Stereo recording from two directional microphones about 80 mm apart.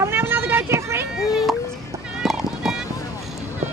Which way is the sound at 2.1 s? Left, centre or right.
Centre.